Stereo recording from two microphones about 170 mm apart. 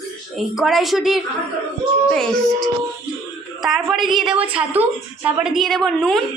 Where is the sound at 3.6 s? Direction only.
Centre (ahead or behind).